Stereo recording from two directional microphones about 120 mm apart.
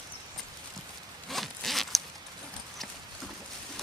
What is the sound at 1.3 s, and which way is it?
Zipper, centre (ahead or behind).